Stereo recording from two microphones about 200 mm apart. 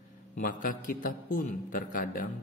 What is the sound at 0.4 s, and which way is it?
A man's voice, 45° left (ahead or behind).